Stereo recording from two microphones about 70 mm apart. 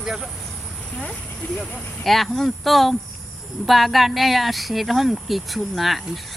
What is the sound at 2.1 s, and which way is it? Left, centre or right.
Speech, centre.